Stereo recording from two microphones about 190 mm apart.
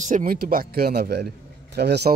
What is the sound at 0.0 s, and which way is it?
Speech, 45° right (ahead or behind).